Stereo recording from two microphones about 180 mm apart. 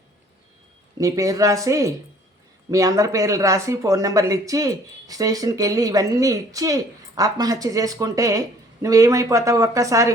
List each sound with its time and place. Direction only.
0.9 s speech: 20° right (ahead or behind)